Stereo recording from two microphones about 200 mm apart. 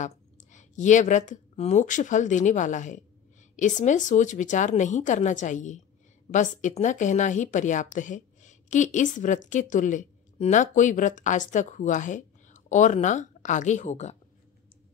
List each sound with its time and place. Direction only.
0.0 s a woman's voice: 35° left (ahead or behind)